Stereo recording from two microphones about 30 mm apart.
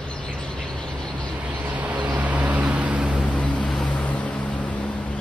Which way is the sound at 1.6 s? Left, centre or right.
Right.